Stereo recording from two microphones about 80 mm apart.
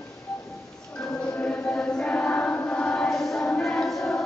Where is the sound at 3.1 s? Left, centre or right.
Centre.